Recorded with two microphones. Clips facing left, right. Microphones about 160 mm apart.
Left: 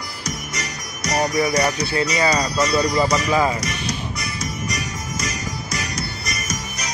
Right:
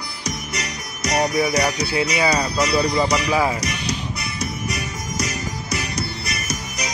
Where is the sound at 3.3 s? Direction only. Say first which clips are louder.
Left 1 dB; 10° right (ahead or behind).